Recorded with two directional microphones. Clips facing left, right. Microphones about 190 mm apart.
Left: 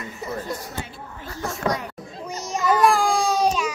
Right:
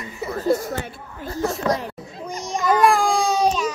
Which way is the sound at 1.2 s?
35° right (ahead or behind).